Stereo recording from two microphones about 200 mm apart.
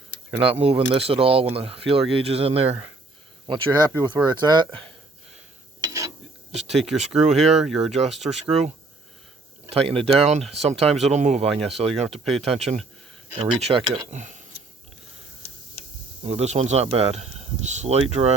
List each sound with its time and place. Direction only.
0.3 s speech: 30° right (ahead or behind)
6.8 s speech: 35° right (ahead or behind)
16.2 s speech: 30° right (ahead or behind)